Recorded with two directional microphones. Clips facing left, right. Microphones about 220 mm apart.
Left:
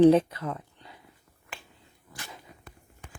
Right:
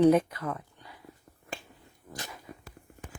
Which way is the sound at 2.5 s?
50° right (ahead or behind).